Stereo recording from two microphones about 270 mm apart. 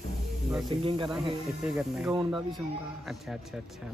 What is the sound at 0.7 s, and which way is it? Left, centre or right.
Speech, centre.